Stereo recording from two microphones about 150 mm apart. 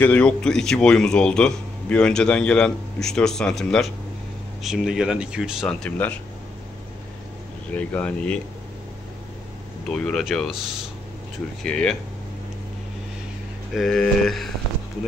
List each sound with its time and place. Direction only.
0.0 s speech: 10° left (ahead or behind)
7.7 s speech: 10° left (ahead or behind)
9.8 s speech: 5° left (ahead or behind)
11.6 s speech: 5° left (ahead or behind)
13.7 s speech: 5° left (ahead or behind)